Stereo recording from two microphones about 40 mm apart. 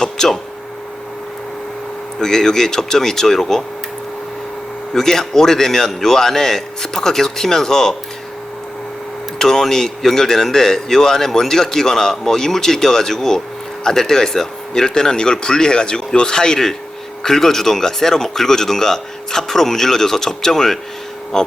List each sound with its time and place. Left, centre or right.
0.0 s a sound: centre
2.2 s speech: centre
4.9 s speech: centre
9.4 s speech: centre